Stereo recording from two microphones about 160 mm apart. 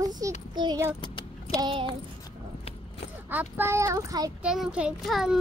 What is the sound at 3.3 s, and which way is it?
A child's voice, 10° right (ahead or behind).